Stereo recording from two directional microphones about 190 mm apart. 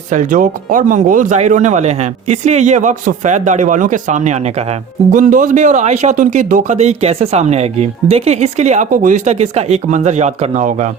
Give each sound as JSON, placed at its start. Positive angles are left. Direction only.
{"t": 0.1, "sound": "speech", "side_deg": -40}